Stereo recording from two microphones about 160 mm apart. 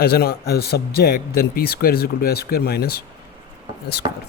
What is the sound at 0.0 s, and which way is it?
A man's voice, 75° left (ahead or behind).